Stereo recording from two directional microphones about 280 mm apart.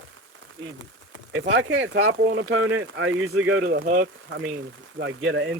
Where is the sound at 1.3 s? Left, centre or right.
Right.